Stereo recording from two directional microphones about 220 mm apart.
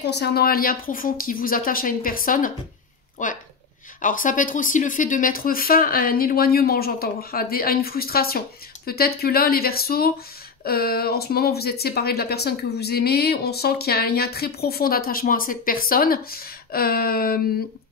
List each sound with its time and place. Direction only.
0.0 s speech: 50° left (ahead or behind)